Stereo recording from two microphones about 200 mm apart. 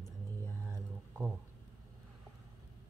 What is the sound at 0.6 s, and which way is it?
Speech, 15° right (ahead or behind).